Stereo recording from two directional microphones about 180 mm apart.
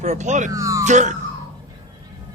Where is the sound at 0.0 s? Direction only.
40° right (ahead or behind).